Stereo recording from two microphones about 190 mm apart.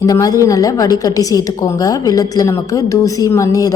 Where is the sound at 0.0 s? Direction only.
20° left (ahead or behind).